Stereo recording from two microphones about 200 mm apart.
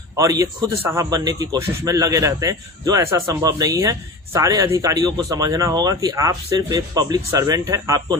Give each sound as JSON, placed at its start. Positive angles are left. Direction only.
{"t": 0.2, "sound": "a man's voice", "side_deg": -15}